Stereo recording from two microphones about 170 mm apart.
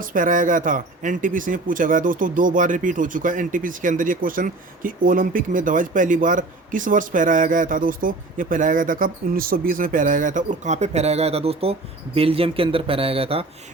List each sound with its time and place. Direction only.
0.0 s speech: 55° right (ahead or behind); by 13.4 s 35° right (ahead or behind)